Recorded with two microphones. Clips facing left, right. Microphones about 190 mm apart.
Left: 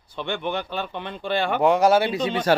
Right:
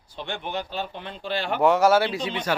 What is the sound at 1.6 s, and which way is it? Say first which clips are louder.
Speech: even; 15° left (ahead or behind).